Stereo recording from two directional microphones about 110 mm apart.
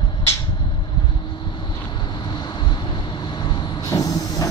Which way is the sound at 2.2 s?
40° left (ahead or behind).